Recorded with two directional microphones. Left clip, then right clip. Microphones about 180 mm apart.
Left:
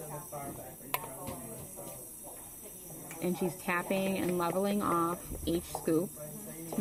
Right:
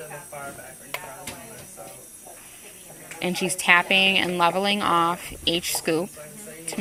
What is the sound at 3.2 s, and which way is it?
Speech, 25° right (ahead or behind).